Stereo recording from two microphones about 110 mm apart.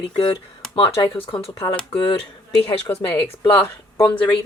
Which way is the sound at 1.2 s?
55° left (ahead or behind).